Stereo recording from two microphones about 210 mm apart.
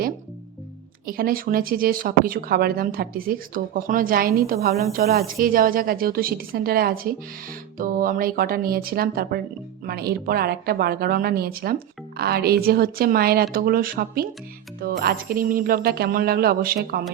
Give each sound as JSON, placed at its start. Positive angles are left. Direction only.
{"t": 1.0, "sound": "speech", "side_deg": -45}